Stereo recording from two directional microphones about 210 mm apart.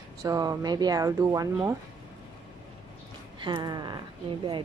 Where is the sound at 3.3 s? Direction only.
20° right (ahead or behind).